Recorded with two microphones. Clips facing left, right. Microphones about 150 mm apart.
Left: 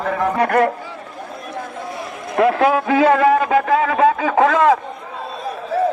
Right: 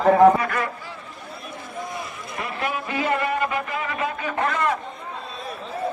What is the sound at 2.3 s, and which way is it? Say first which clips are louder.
A man's voice: left 14 dB; 90° left.